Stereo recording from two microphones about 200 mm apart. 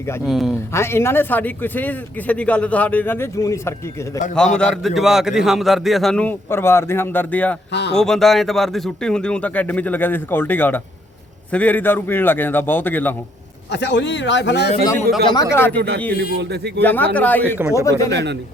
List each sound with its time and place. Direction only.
0.3 s a man's voice: centre (ahead or behind)
0.7 s speech: 10° left (ahead or behind)
4.4 s a man's voice: 5° left (ahead or behind)
7.7 s speech: 60° left (ahead or behind)
7.9 s a man's voice: centre (ahead or behind)
13.7 s speech: 60° left (ahead or behind)
15.3 s speech: 15° left (ahead or behind)
16.4 s speech: 60° right (ahead or behind)
16.8 s speech: 10° left (ahead or behind)
17.6 s a man's voice: 15° right (ahead or behind)
18.1 s speech: 60° right (ahead or behind)